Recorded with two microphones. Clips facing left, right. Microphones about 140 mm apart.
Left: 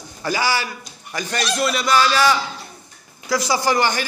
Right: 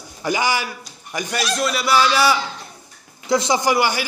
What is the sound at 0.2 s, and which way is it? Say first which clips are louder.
A man's voice: right 1 dB; 15° right (ahead or behind).